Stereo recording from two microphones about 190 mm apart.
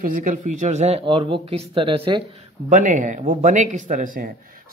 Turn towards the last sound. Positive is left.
turn(degrees=-45)  # may be behind; listen again after turning